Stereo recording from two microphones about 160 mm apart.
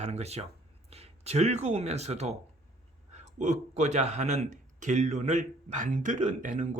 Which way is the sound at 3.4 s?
50° right (ahead or behind).